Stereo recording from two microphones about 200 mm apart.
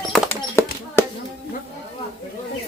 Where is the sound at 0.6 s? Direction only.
15° left (ahead or behind).